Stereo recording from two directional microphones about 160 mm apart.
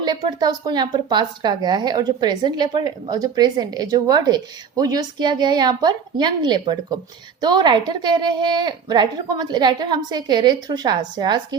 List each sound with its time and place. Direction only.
0.0 s speech: 25° right (ahead or behind)